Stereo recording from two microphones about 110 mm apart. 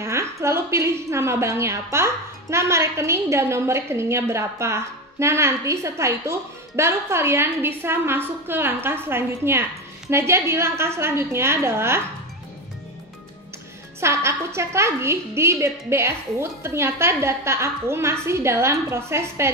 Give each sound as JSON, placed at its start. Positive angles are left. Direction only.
{"t": 0.0, "sound": "a woman's voice", "side_deg": -25}
{"t": 13.9, "sound": "a woman's voice", "side_deg": -25}